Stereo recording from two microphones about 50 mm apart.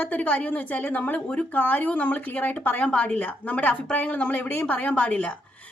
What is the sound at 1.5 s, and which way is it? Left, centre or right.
A woman's voice, left.